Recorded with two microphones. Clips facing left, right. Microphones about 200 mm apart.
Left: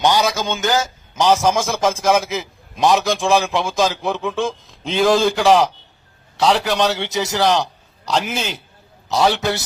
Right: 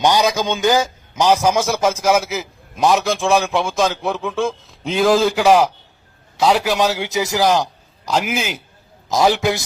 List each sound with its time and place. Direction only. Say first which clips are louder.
0.0 s a man's voice: right 1 dB; 15° right (ahead or behind)